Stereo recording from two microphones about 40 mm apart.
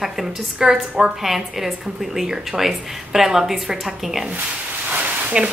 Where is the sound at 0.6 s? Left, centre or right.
Right.